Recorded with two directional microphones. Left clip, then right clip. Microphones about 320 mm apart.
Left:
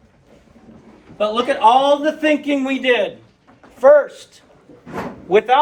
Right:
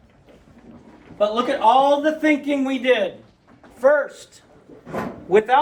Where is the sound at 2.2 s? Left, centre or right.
Left.